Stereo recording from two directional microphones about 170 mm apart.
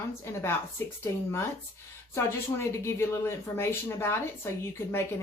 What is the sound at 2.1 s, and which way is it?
Speech, 15° left (ahead or behind).